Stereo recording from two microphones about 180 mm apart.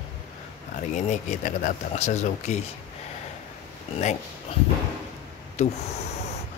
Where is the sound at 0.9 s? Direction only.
40° left (ahead or behind).